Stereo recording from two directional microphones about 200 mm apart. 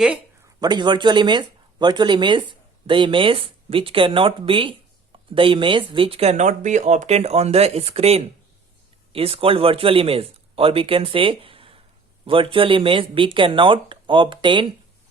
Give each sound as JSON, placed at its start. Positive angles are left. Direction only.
{"t": 0.6, "sound": "speech", "side_deg": -20}